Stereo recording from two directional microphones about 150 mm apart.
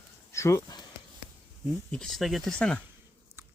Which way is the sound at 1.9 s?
Centre (ahead or behind).